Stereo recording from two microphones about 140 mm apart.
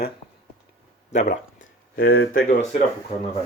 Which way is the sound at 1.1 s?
60° left (ahead or behind).